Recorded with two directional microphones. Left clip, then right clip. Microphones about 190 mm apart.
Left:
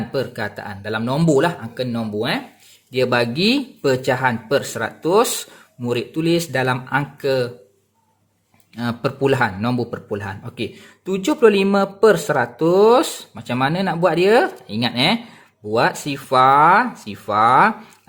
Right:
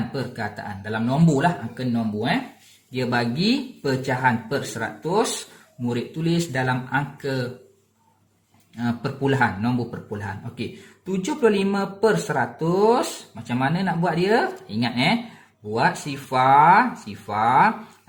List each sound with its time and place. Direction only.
0.1 s speech: 45° left (ahead or behind)
8.7 s speech: 55° left (ahead or behind)